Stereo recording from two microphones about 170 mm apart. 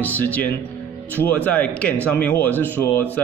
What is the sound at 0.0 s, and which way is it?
Speech, 10° left (ahead or behind).